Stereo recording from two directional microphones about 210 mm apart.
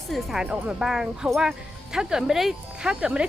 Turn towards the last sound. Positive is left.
turn(degrees=-5)  # may be behind; listen again after turning